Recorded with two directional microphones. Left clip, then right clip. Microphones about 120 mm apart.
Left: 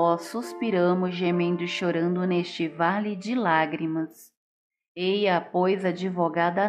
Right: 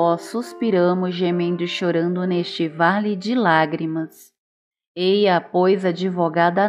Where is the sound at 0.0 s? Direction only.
25° right (ahead or behind).